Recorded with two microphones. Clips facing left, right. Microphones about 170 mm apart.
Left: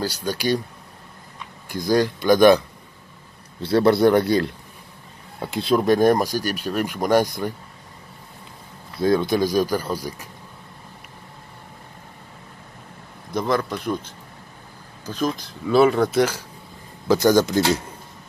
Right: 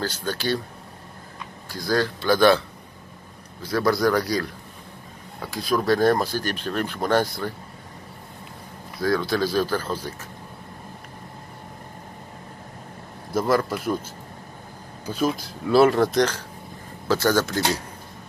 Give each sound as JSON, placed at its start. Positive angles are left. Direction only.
{"t": 0.0, "sound": "speech", "side_deg": 10}
{"t": 1.7, "sound": "speech", "side_deg": 20}
{"t": 3.6, "sound": "a man's voice", "side_deg": 30}
{"t": 9.0, "sound": "speech", "side_deg": 20}
{"t": 13.3, "sound": "speech", "side_deg": -5}